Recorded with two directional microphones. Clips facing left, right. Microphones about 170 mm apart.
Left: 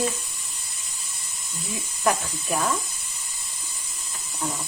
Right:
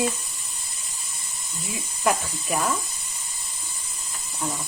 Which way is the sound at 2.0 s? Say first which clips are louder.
Even; centre (ahead or behind).